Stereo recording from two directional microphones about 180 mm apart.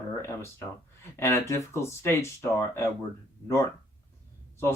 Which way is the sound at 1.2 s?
15° left (ahead or behind).